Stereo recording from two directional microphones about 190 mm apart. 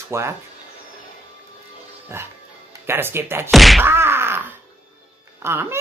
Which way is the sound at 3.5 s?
Centre (ahead or behind).